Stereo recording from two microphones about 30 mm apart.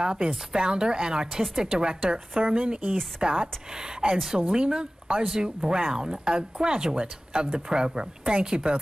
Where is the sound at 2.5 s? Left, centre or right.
Right.